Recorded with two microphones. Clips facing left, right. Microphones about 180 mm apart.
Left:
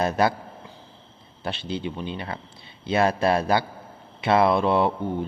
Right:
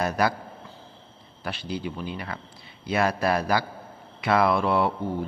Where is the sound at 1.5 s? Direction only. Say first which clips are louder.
Left 2 dB; 25° left (ahead or behind).